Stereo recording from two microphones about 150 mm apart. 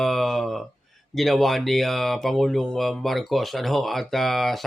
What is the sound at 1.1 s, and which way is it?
Speech, centre (ahead or behind).